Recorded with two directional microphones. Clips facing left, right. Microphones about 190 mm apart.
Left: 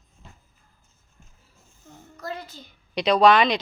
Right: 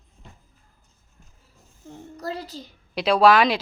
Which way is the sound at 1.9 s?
35° right (ahead or behind).